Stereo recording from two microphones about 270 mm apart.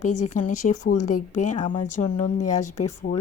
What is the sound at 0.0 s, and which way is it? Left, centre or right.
A woman's voice, left.